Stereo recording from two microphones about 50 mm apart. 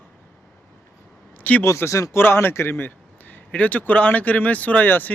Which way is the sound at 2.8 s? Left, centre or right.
Left.